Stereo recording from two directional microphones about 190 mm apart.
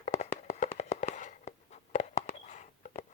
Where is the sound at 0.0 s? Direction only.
35° left (ahead or behind).